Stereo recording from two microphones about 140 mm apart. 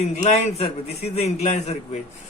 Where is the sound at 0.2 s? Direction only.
50° left (ahead or behind).